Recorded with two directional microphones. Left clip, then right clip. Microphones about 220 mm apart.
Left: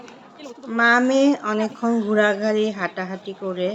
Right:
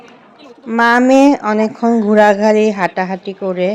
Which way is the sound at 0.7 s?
35° right (ahead or behind).